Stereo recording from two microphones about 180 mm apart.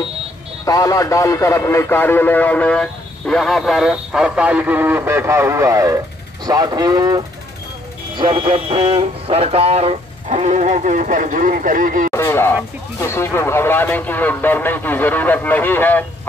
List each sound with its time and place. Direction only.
0.7 s speech: 20° left (ahead or behind); by 12.1 s 50° right (ahead or behind)
12.1 s speech: 15° left (ahead or behind)